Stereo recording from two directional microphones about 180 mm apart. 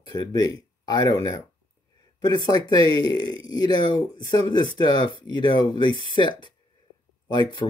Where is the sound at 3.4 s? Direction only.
20° left (ahead or behind).